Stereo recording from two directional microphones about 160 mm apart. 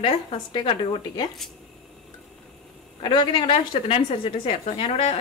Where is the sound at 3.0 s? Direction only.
30° left (ahead or behind).